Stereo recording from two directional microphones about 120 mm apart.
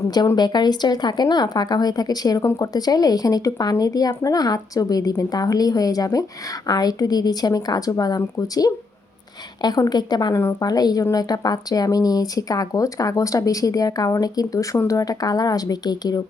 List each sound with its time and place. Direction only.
0.0 s a woman's voice: 35° left (ahead or behind)
2.4 s speech: 20° left (ahead or behind)
2.7 s a woman's voice: 30° left (ahead or behind)